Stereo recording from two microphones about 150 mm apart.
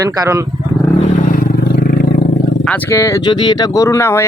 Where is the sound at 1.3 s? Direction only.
70° left (ahead or behind).